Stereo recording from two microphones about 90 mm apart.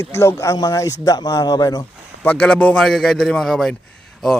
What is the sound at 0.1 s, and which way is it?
Speech, 30° left (ahead or behind).